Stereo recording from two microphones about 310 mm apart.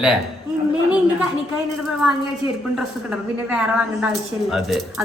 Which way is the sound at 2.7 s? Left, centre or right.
Centre.